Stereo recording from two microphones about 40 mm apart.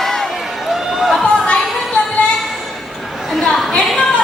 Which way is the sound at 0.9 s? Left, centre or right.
Centre.